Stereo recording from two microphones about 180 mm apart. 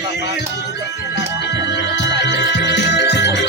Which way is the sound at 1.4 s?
70° left (ahead or behind).